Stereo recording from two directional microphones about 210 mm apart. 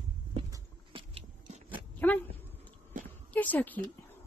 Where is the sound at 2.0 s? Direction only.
5° left (ahead or behind).